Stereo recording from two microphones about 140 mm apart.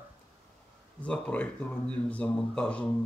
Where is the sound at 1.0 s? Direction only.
10° left (ahead or behind).